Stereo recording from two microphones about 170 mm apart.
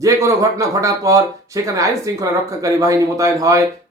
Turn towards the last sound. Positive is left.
turn(degrees=-20)  # may be behind; listen again after turning